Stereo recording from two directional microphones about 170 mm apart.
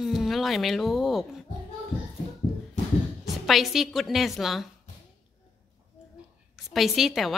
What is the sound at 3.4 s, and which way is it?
A woman's voice, centre (ahead or behind).